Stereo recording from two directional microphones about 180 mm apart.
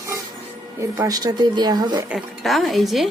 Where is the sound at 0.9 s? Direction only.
20° right (ahead or behind).